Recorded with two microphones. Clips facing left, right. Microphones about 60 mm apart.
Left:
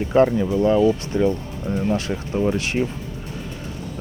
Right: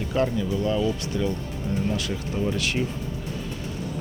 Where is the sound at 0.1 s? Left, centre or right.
Left.